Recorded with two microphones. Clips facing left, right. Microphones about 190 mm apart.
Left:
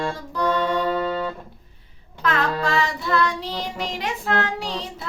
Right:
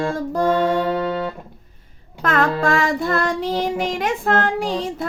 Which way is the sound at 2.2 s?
50° right (ahead or behind).